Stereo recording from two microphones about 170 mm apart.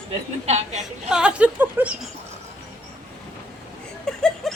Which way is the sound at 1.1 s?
5° right (ahead or behind).